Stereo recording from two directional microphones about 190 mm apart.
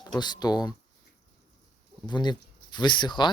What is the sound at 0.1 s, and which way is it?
Speech, 20° left (ahead or behind).